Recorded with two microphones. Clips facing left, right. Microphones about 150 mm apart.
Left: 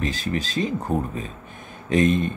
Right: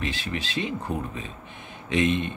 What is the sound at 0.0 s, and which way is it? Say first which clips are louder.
Speech: left 5 dB; 40° left (ahead or behind).